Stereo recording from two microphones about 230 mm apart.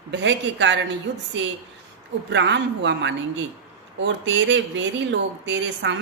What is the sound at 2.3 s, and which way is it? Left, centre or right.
Speech, right.